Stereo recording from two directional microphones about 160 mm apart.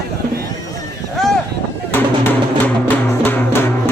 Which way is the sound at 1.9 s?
10° left (ahead or behind).